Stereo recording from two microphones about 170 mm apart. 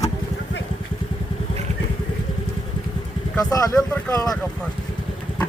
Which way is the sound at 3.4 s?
20° left (ahead or behind).